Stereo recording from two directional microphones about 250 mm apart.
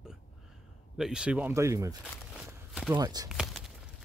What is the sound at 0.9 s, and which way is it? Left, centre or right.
Speech, centre.